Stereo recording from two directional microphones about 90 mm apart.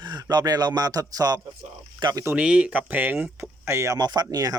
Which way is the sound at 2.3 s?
10° right (ahead or behind).